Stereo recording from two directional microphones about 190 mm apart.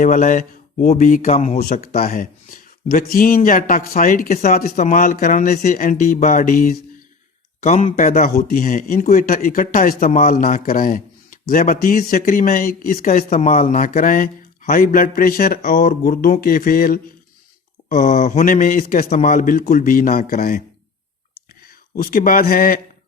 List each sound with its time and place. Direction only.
0.0 s speech: 40° left (ahead or behind)
1.6 s speech: 50° left (ahead or behind)
22.0 s speech: 50° left (ahead or behind)